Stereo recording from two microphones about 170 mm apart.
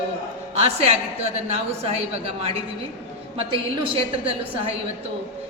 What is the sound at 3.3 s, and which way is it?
A man's voice, 30° right (ahead or behind).